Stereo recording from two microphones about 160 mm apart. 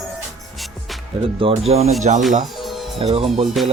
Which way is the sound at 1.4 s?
35° right (ahead or behind).